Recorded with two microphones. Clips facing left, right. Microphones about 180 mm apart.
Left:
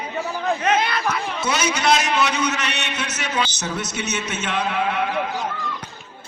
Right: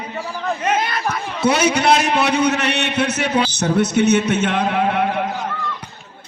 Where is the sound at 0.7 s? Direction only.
45° right (ahead or behind).